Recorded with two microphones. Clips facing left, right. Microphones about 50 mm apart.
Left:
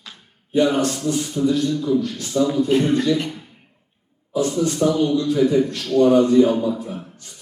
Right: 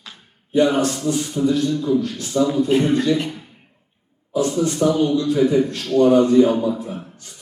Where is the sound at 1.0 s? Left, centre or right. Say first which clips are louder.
Right 1 dB; centre.